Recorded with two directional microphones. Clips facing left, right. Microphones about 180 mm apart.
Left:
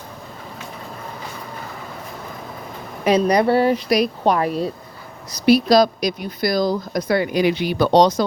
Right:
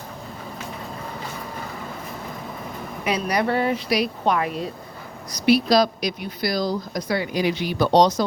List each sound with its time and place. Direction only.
3.0 s a woman's voice: 40° left (ahead or behind); by 8.2 s 60° left (ahead or behind)